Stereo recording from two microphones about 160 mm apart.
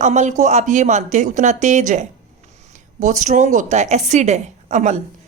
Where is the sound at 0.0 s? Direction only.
45° right (ahead or behind).